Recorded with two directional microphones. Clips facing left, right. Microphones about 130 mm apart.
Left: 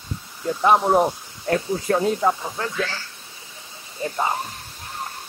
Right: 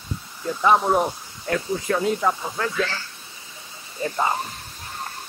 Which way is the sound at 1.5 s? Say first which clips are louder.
Left 2 dB; 30° left (ahead or behind).